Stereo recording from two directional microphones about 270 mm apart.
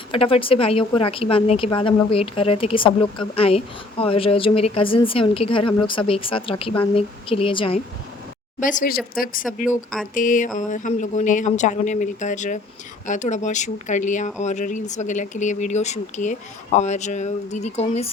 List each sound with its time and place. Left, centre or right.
0.1 s speech: centre
8.6 s speech: left
9.6 s speech: centre
10.2 s speech: left